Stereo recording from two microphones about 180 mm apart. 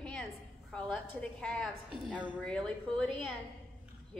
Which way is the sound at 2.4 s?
5° left (ahead or behind).